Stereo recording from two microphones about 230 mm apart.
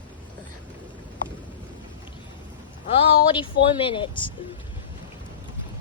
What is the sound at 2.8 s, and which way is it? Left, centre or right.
Speech, left.